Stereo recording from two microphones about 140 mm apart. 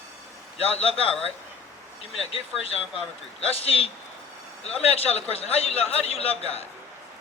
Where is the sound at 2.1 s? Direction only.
45° left (ahead or behind).